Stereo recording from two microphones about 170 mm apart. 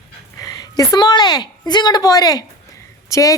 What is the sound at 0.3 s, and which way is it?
A woman's voice, 20° left (ahead or behind).